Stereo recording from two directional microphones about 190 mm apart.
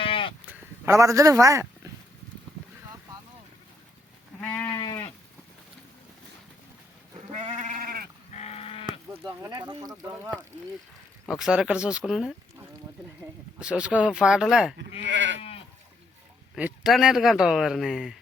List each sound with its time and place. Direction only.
0.0 s sheep: 30° left (ahead or behind)
0.4 s a sound: 15° right (ahead or behind)
4.4 s goat: 10° left (ahead or behind)
4.8 s sheep: 20° left (ahead or behind)
7.3 s sheep: 40° right (ahead or behind)
8.3 s sheep: 35° left (ahead or behind)
9.4 s speech: 20° right (ahead or behind)
11.3 s speech: 5° right (ahead or behind)
13.6 s speech: 5° right (ahead or behind)
15.0 s goat: 70° right (ahead or behind)
15.4 s goat: 30° left (ahead or behind)
16.6 s speech: 5° right (ahead or behind)